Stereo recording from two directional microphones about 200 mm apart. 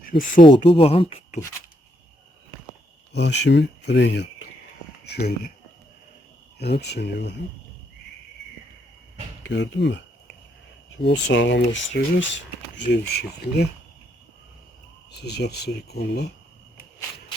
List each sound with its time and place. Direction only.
0.4 s speech: 25° left (ahead or behind)
3.1 s speech: 60° left (ahead or behind)
6.6 s speech: 55° left (ahead or behind)
9.4 s speech: 60° left (ahead or behind)
11.0 s speech: 65° left (ahead or behind)
15.1 s speech: 55° left (ahead or behind)